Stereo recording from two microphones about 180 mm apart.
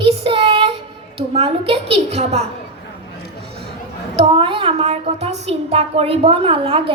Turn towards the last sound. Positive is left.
turn(degrees=-30)  # may be behind; listen again after turning